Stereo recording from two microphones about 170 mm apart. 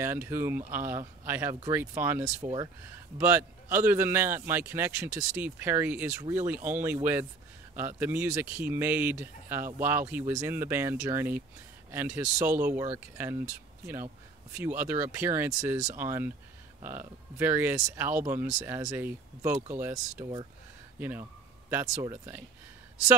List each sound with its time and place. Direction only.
0.0 s a man's voice: 15° right (ahead or behind)
2.4 s a man's voice: 25° right (ahead or behind)
14.5 s a man's voice: 10° right (ahead or behind)
17.4 s a man's voice: 10° right (ahead or behind)
22.0 s a man's voice: 15° right (ahead or behind)